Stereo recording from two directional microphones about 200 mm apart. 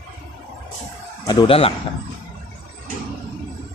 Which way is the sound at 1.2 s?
30° left (ahead or behind).